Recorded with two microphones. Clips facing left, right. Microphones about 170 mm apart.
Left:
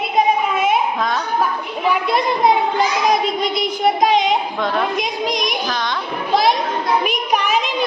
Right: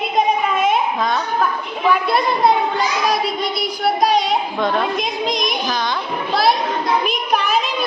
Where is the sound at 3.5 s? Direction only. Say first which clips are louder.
Left 2 dB; 20° left (ahead or behind).